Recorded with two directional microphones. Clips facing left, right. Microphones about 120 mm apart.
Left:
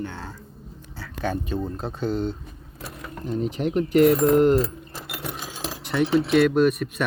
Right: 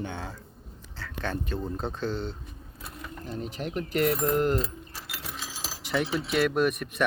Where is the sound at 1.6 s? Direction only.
Centre (ahead or behind).